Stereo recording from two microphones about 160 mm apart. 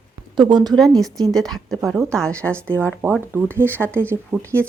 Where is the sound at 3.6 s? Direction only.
10° left (ahead or behind).